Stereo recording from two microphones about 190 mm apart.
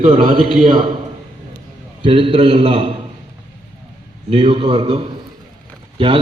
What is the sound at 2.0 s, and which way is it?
Speech, 30° right (ahead or behind).